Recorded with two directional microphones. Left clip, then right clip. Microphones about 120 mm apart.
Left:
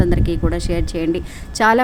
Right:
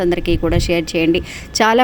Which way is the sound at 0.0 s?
25° right (ahead or behind).